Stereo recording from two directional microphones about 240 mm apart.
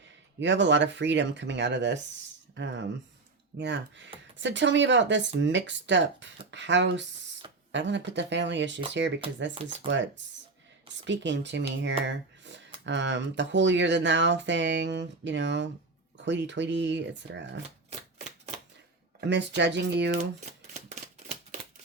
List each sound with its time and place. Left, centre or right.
0.3 s speech: right
19.3 s speech: right
20.9 s a sound: right